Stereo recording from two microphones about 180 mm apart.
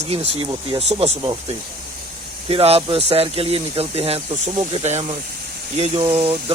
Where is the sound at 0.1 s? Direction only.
35° right (ahead or behind).